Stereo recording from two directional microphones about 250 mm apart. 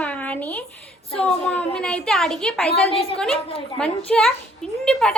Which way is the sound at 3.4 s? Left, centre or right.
Left.